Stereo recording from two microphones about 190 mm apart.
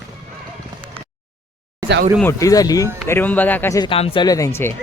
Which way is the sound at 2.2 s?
15° left (ahead or behind).